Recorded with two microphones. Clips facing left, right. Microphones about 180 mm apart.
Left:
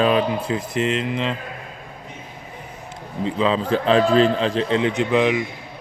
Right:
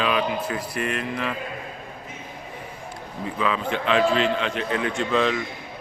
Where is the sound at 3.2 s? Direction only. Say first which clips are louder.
Left 5 dB; 25° left (ahead or behind).